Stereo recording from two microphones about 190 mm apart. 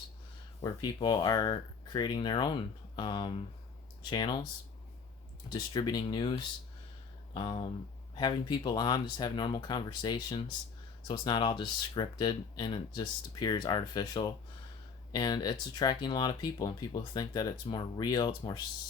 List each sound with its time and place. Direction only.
0.6 s speech: 20° left (ahead or behind)
5.5 s speech: 20° left (ahead or behind)
7.3 s speech: 25° left (ahead or behind)